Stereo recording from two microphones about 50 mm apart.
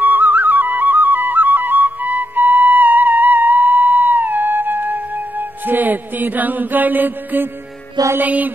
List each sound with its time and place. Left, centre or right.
0.0 s flute: right
5.7 s mantra: right